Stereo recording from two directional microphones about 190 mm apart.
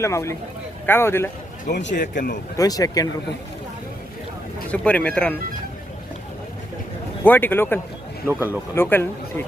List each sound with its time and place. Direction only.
0.0 s speech: 15° left (ahead or behind)
1.6 s speech: 65° left (ahead or behind)
2.0 s a man's voice: 45° left (ahead or behind)
2.6 s speech: 20° left (ahead or behind)
4.7 s speech: 5° left (ahead or behind)
7.3 s speech: 10° left (ahead or behind)
8.3 s speech: 10° right (ahead or behind)
8.7 s speech: 10° left (ahead or behind)